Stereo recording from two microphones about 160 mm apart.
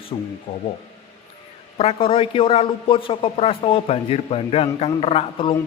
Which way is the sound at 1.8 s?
35° left (ahead or behind).